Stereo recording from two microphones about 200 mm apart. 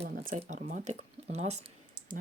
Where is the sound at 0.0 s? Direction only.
30° right (ahead or behind).